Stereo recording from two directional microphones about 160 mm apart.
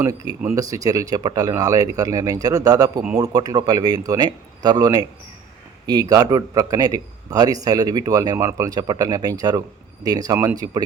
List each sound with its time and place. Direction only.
0.3 s a man's voice: 20° right (ahead or behind)